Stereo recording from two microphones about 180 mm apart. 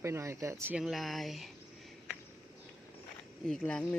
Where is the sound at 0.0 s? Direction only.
15° right (ahead or behind).